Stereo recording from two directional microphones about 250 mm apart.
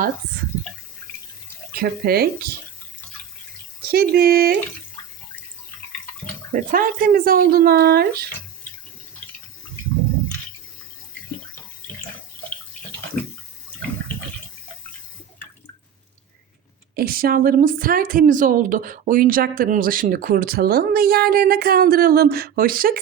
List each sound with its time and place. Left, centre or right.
1.7 s a woman's voice: right
3.8 s a woman's voice: right
6.5 s a woman's voice: right
16.9 s a woman's voice: right